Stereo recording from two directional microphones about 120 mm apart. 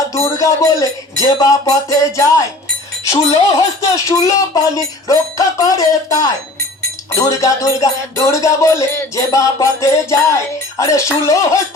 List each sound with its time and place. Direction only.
0.1 s speech: 25° left (ahead or behind)
1.4 s music: 30° left (ahead or behind)